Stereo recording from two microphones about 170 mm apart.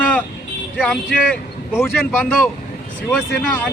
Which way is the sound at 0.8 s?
5° left (ahead or behind).